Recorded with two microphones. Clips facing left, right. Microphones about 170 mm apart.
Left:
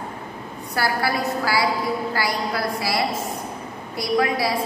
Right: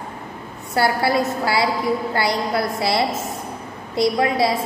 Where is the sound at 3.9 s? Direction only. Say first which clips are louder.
Right 3 dB; 25° right (ahead or behind).